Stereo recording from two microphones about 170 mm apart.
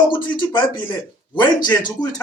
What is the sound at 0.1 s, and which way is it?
Speech, 25° left (ahead or behind).